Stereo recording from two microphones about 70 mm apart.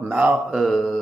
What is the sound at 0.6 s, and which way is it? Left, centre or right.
Speech, centre.